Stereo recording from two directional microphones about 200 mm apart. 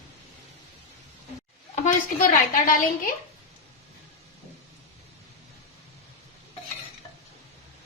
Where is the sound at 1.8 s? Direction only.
40° left (ahead or behind).